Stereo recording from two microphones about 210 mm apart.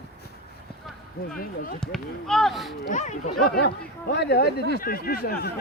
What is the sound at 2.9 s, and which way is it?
Speech, 35° left (ahead or behind).